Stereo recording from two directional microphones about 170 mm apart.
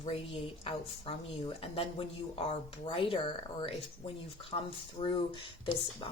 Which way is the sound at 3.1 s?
30° left (ahead or behind).